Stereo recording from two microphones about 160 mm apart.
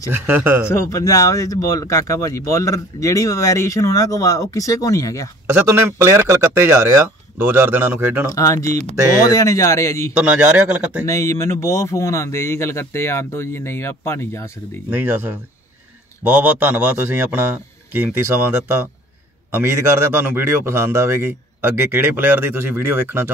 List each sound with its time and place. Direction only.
0.1 s a man's voice: 10° right (ahead or behind)
0.7 s speech: 20° left (ahead or behind)
5.5 s a man's voice: 15° right (ahead or behind)
8.3 s speech: 20° left (ahead or behind)
10.1 s a man's voice: 10° right (ahead or behind)
11.1 s speech: 20° left (ahead or behind)
14.9 s a man's voice: 10° right (ahead or behind)